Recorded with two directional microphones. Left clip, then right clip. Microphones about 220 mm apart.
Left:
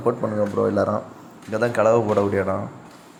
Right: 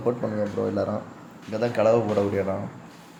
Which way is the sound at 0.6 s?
15° left (ahead or behind).